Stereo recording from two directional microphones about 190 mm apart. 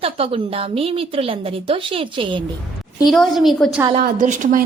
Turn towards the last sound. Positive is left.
turn(degrees=-45)  # may be behind; listen again after turning